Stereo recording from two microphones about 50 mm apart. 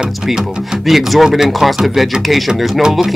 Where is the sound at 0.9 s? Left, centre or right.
Centre.